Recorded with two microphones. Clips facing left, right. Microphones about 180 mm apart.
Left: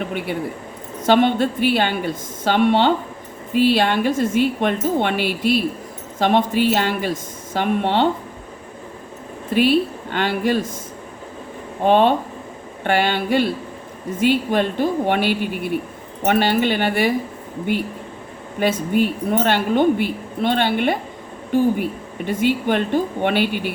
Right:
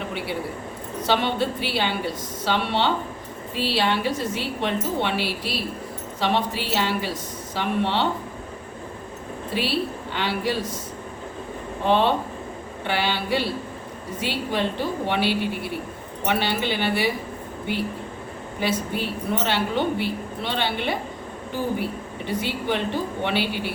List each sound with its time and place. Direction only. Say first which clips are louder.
1.0 s a woman's voice: left 7 dB; 50° left (ahead or behind)
9.6 s a woman's voice: left 9 dB; 50° left (ahead or behind)
11.8 s a woman's voice: left 5 dB; 50° left (ahead or behind)
18.6 s a woman's voice: left 7 dB; 50° left (ahead or behind)
22.3 s a woman's voice: left 7 dB; 50° left (ahead or behind)